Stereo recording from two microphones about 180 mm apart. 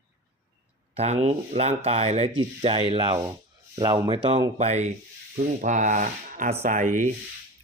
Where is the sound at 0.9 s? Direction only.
35° right (ahead or behind).